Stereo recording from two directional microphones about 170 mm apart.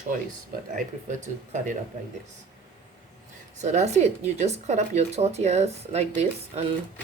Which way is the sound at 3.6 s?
45° right (ahead or behind).